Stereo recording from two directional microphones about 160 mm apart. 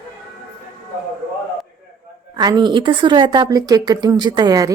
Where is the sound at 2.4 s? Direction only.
25° right (ahead or behind).